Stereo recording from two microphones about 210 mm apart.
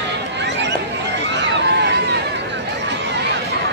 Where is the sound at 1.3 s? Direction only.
55° right (ahead or behind).